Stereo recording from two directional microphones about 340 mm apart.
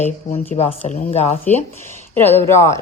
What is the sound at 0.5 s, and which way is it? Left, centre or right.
Speech, centre.